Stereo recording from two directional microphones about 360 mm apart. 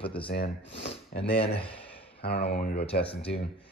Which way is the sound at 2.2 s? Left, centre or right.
Left.